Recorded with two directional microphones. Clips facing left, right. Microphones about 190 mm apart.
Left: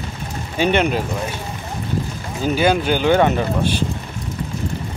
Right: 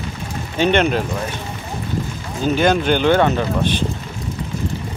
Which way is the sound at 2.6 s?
10° left (ahead or behind).